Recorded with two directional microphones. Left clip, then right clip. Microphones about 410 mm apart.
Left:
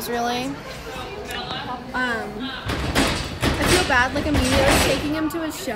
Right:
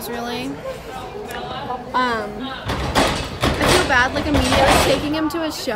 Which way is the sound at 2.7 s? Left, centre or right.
Right.